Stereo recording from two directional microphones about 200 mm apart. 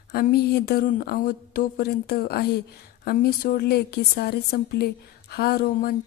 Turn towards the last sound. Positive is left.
turn(degrees=50)  # may be behind; listen again after turning